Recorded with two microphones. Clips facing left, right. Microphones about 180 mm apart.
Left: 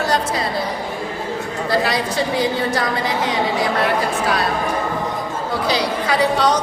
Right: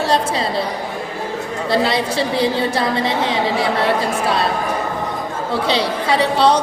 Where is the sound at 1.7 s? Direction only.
25° right (ahead or behind).